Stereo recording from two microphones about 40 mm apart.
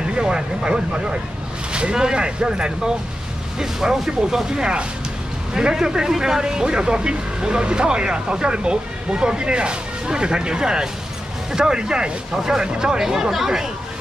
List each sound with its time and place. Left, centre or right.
0.0 s speech: right